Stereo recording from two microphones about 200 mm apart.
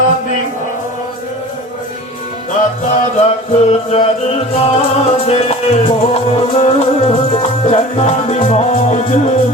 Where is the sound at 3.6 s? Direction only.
30° left (ahead or behind).